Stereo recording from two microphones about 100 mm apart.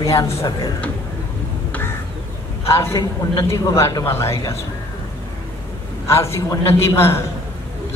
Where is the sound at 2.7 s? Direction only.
30° left (ahead or behind).